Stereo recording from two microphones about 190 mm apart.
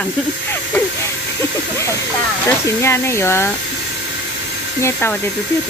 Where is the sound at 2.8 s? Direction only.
15° left (ahead or behind).